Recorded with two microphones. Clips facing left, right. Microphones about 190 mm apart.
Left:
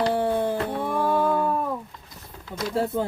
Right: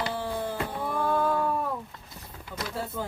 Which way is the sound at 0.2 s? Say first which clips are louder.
Left 9 dB; 55° left (ahead or behind).